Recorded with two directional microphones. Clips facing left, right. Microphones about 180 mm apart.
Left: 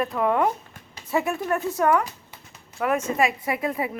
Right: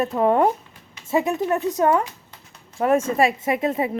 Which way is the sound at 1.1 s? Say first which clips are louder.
Right 3 dB; 20° right (ahead or behind).